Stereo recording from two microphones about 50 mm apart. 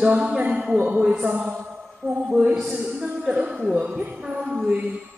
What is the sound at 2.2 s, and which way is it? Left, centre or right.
Music, centre.